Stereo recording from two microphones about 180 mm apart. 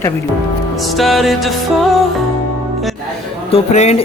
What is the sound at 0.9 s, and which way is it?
Music, centre (ahead or behind).